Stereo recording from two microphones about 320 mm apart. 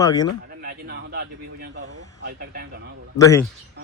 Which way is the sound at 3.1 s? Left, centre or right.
Centre.